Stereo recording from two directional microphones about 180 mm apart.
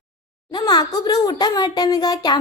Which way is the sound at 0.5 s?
25° left (ahead or behind).